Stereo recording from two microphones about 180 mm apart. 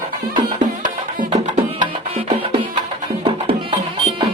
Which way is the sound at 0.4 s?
45° right (ahead or behind).